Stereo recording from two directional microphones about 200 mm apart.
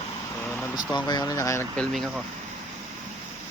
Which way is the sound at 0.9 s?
20° left (ahead or behind).